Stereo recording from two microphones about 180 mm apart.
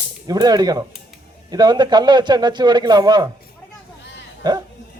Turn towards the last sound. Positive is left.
turn(degrees=-25)  # may be behind; listen again after turning